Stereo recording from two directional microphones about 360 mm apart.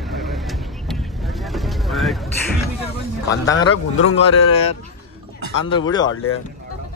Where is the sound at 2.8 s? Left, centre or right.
Centre.